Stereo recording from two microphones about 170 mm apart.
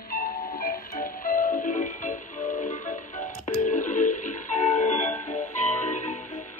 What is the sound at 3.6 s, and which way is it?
Telephone dialing, 50° left (ahead or behind).